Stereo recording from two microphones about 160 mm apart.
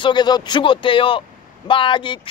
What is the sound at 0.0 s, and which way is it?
A man's voice, 25° left (ahead or behind).